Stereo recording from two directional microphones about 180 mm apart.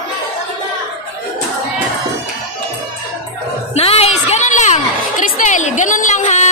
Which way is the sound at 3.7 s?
35° left (ahead or behind).